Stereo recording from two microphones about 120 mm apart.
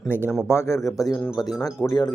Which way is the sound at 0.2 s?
10° right (ahead or behind).